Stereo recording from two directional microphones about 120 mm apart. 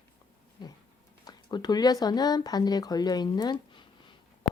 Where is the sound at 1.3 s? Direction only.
35° left (ahead or behind).